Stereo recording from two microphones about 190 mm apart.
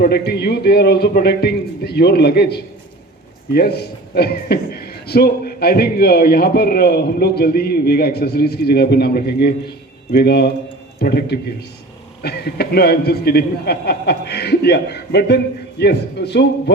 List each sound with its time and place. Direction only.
0.0 s a man's voice: 55° left (ahead or behind)